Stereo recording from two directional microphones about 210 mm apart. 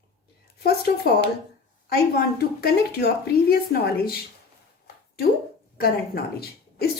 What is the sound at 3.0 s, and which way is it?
Speech, 50° left (ahead or behind).